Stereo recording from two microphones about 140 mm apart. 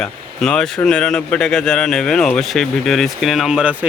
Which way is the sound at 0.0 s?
5° left (ahead or behind).